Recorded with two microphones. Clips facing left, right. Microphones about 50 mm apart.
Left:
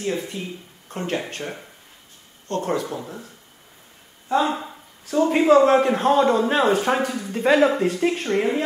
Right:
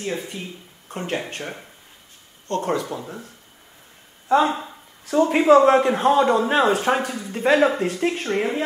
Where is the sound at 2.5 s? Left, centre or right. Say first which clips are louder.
Right 1 dB; right.